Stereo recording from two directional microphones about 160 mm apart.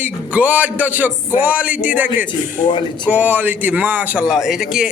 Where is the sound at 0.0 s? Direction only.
10° right (ahead or behind).